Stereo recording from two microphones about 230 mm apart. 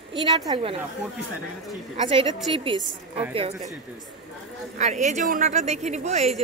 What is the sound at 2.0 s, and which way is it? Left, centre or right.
A woman's voice, right.